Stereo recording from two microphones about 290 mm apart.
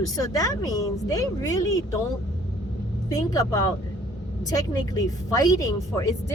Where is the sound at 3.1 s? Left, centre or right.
Centre.